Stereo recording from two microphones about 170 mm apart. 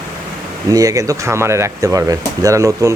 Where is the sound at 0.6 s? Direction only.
20° right (ahead or behind).